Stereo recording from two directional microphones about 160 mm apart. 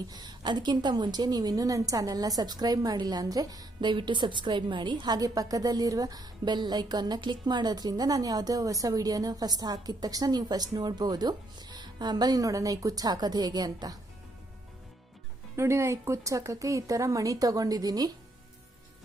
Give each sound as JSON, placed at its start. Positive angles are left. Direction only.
{"t": 0.1, "sound": "a woman's voice", "side_deg": -25}
{"t": 15.5, "sound": "a woman's voice", "side_deg": -15}